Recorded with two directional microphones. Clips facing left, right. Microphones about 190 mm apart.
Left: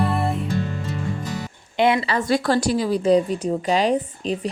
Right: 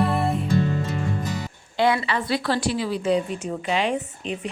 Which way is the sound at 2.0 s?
40° left (ahead or behind).